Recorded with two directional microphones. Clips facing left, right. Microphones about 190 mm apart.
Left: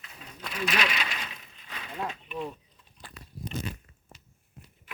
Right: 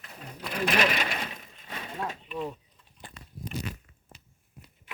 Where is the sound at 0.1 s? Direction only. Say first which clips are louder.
Right 5 dB; 55° right (ahead or behind).